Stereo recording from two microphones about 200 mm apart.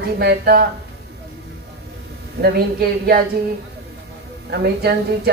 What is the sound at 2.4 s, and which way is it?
Speech, 55° right (ahead or behind).